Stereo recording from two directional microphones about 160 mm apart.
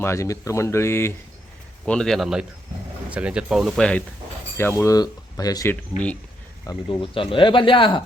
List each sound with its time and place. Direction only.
0.0 s speech: 15° left (ahead or behind)
1.8 s speech: 5° left (ahead or behind); by 8.0 s 30° left (ahead or behind)